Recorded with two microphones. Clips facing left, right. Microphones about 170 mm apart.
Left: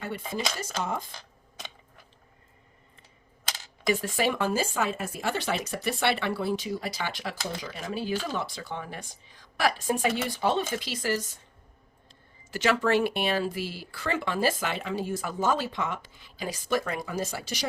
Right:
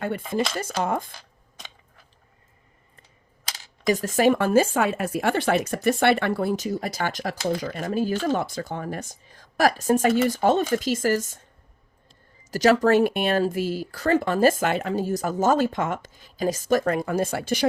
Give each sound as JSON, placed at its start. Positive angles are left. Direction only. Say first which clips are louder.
{"t": 0.6, "sound": "speech", "louder": "right 6 dB", "side_deg": -55}
{"t": 3.8, "sound": "speech", "louder": "right 7 dB", "side_deg": -40}
{"t": 12.5, "sound": "speech", "louder": "right 7 dB", "side_deg": -40}